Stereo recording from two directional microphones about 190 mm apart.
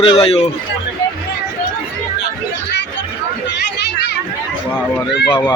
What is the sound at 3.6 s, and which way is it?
Children playing, 60° left (ahead or behind).